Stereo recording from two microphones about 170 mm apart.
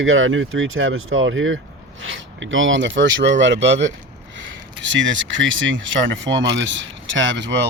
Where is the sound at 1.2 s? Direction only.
90° right.